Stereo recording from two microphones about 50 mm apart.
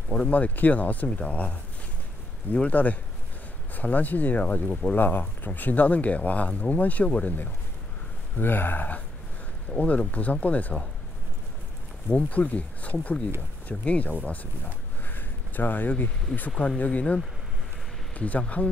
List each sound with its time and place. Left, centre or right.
0.3 s speech: left
4.9 s speech: left
8.4 s speech: left
12.1 s speech: left
16.5 s speech: left